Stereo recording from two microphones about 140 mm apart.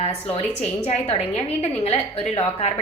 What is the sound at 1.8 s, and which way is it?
Speech, 50° left (ahead or behind).